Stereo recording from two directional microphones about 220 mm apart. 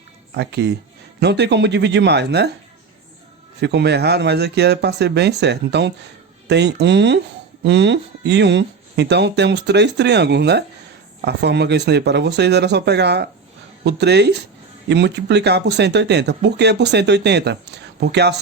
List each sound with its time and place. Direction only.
0.3 s speech: 50° right (ahead or behind)
3.6 s speech: 50° right (ahead or behind)